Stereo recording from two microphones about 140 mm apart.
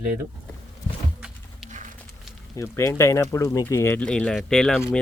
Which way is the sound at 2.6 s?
20° left (ahead or behind).